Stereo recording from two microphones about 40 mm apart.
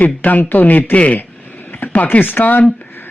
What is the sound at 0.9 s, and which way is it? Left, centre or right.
Speech, left.